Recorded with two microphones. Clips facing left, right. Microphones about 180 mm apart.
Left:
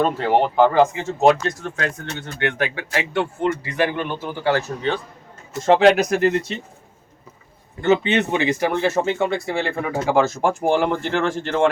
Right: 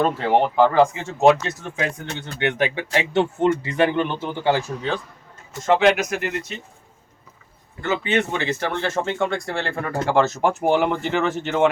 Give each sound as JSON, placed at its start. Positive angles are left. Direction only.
{"t": 0.2, "sound": "speech", "side_deg": 0}
{"t": 5.6, "sound": "speech", "side_deg": 35}
{"t": 8.0, "sound": "speech", "side_deg": 20}